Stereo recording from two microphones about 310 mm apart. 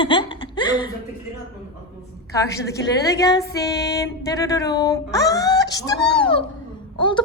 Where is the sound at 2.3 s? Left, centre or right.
Centre.